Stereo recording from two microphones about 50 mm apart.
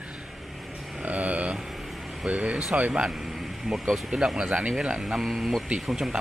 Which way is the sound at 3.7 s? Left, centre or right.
Centre.